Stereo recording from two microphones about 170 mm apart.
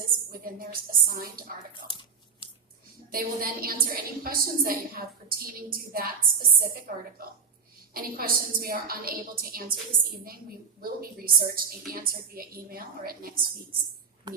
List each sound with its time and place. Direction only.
0.0 s a woman's voice: 60° right (ahead or behind)
1.7 s tearing: 30° left (ahead or behind)
3.1 s a woman's voice: 60° right (ahead or behind)